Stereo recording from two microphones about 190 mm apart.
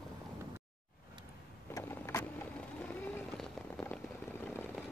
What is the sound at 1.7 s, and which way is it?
Vehicle, 15° left (ahead or behind).